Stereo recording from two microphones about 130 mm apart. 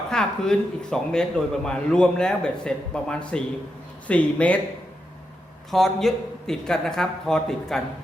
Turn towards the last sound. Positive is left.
turn(degrees=5)  # may be behind; listen again after turning